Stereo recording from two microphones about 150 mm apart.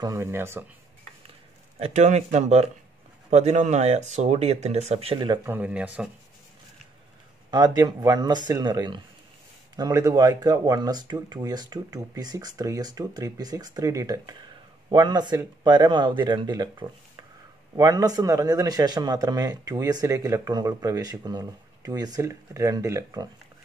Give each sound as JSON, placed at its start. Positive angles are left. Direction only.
{"t": 0.0, "sound": "speech", "side_deg": -20}
{"t": 1.8, "sound": "speech", "side_deg": -50}
{"t": 5.4, "sound": "speech", "side_deg": -10}
{"t": 7.5, "sound": "a man's voice", "side_deg": -25}